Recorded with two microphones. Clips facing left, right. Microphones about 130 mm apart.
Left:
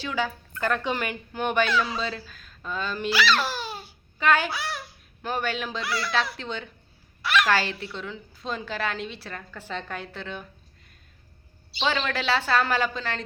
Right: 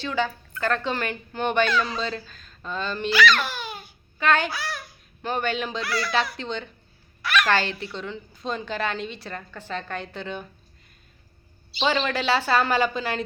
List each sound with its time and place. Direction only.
0.0 s a woman's voice: 10° left (ahead or behind)
3.2 s babbling: 30° left (ahead or behind)
4.2 s a woman's voice: 5° left (ahead or behind)
4.5 s a sound: 25° left (ahead or behind)
5.2 s a woman's voice: 5° left (ahead or behind)
7.2 s a sound: 25° left (ahead or behind)
7.4 s a woman's voice: 5° left (ahead or behind)
11.8 s a woman's voice: 5° right (ahead or behind)